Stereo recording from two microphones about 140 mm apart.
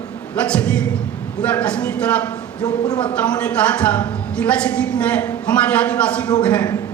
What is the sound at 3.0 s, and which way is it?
A woman's voice, 10° left (ahead or behind).